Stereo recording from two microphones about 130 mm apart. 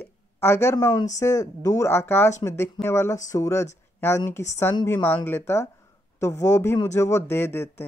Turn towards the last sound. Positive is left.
turn(degrees=20)  # may be behind; listen again after turning